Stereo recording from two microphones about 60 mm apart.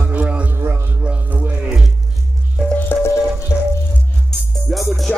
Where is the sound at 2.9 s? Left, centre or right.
Left.